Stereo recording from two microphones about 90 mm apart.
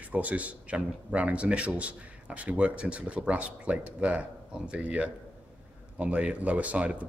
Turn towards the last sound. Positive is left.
turn(degrees=-15)  # may be behind; listen again after turning